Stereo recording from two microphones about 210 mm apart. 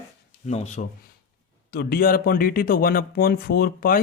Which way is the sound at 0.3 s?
30° left (ahead or behind).